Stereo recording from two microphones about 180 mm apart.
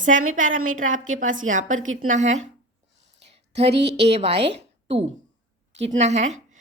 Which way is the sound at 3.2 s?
35° right (ahead or behind).